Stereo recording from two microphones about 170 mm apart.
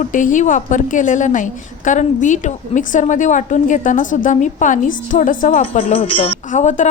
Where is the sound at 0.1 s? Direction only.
50° left (ahead or behind).